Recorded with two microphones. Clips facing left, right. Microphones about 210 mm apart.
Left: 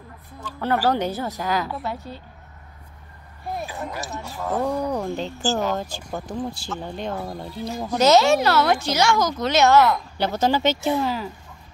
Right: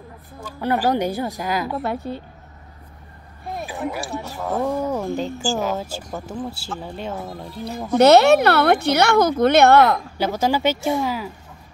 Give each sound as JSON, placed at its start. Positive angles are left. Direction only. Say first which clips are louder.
{"t": 0.4, "sound": "speech", "louder": "right 1 dB", "side_deg": -10}
{"t": 1.8, "sound": "a woman's voice", "louder": "right 6 dB", "side_deg": -60}
{"t": 3.6, "sound": "speech", "louder": "right 4 dB", "side_deg": -15}
{"t": 4.5, "sound": "speech", "louder": "right 1 dB", "side_deg": 0}
{"t": 8.0, "sound": "a woman's voice", "louder": "right 4 dB", "side_deg": -60}
{"t": 10.1, "sound": "speech", "louder": "right 1 dB", "side_deg": -10}